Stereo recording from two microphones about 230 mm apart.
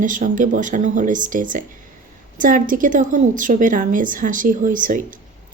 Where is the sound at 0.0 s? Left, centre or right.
Right.